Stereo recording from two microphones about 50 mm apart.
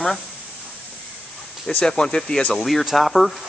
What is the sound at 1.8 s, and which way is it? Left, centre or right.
Speech, centre.